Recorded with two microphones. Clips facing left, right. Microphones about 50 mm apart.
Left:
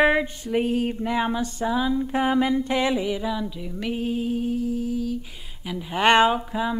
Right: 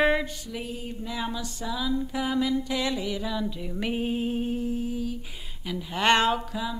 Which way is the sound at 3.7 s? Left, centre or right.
Centre.